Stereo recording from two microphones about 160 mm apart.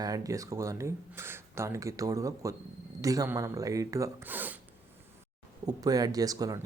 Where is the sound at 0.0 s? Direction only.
20° right (ahead or behind).